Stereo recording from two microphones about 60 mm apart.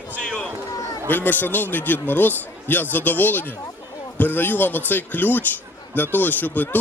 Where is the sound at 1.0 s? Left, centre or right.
Left.